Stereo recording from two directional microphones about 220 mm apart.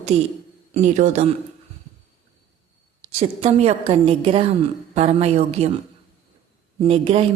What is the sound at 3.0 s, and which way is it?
Speech, 25° right (ahead or behind).